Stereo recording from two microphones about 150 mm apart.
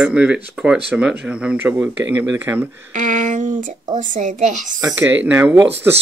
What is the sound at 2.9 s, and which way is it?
A woman's voice, 60° right (ahead or behind).